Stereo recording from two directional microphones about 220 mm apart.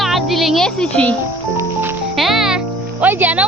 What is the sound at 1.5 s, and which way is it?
Music, 10° right (ahead or behind).